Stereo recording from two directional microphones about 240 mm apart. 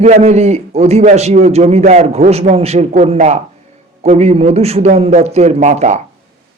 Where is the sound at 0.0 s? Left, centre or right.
Right.